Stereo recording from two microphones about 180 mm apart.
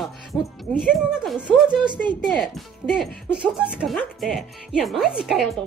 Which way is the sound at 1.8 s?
25° right (ahead or behind).